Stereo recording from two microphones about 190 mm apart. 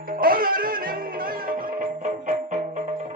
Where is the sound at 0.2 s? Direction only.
50° right (ahead or behind).